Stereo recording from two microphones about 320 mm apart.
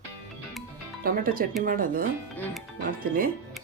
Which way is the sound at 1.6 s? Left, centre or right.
Right.